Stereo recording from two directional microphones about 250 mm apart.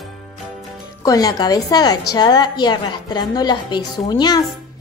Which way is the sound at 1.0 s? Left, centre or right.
Centre.